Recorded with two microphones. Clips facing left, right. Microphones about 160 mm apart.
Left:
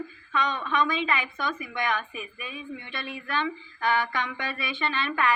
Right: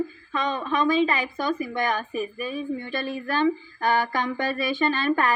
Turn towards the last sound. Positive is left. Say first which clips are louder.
# right 5 dB
turn(degrees=-40)  # may be behind; listen again after turning